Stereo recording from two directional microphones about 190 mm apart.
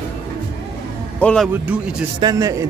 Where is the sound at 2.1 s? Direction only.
20° right (ahead or behind).